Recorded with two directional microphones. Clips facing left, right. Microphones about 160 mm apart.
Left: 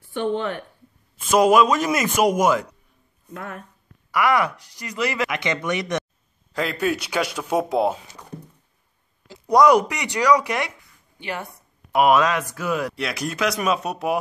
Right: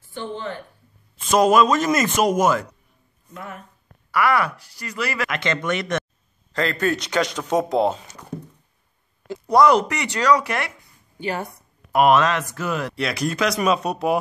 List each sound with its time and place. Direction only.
0.1 s speech: 70° left (ahead or behind)
1.1 s speech: 10° left (ahead or behind)
4.1 s speech: 20° left (ahead or behind)
9.5 s speech: 15° left (ahead or behind)
11.1 s a woman's voice: 40° right (ahead or behind)
11.9 s speech: 10° left (ahead or behind)